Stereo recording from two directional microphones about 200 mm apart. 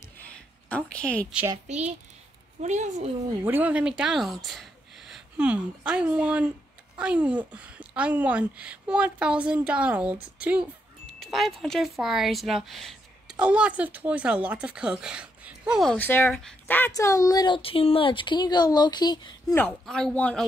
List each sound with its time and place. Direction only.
0.2 s a sound: 10° left (ahead or behind)
1.7 s a woman's voice: 35° right (ahead or behind)
3.4 s a woman's voice: 10° right (ahead or behind); by 19.6 s 20° left (ahead or behind)
19.6 s speech: 5° left (ahead or behind)